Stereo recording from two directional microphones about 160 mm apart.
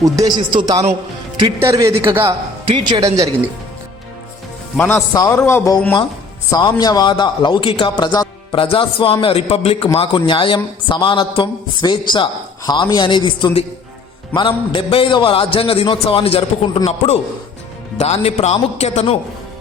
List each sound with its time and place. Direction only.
0.0 s a man's voice: 25° right (ahead or behind)
2.6 s speech: 30° right (ahead or behind)
4.8 s a man's voice: 15° left (ahead or behind); by 19.1 s 45° left (ahead or behind)